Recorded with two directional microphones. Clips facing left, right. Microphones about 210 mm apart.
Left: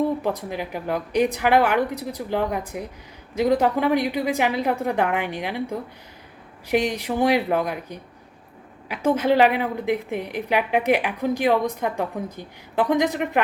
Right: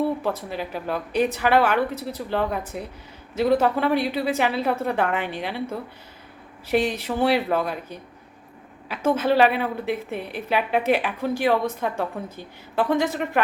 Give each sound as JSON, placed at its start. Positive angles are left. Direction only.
{"t": 0.2, "sound": "a woman's voice", "side_deg": 15}